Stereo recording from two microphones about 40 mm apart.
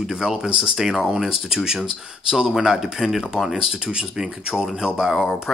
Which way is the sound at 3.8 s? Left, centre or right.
Right.